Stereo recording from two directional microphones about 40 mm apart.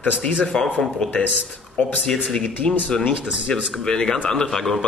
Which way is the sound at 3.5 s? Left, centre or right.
Centre.